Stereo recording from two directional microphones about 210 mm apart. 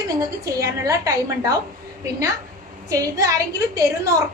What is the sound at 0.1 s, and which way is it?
A woman's voice, 15° right (ahead or behind).